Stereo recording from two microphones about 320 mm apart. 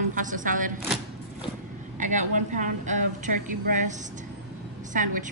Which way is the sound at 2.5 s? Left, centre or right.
Right.